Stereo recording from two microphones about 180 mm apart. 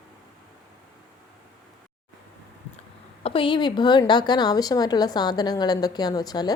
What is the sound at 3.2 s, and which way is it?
Speech, 30° left (ahead or behind).